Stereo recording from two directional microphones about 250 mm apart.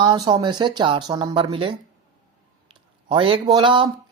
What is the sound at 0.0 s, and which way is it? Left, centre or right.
Speech, centre.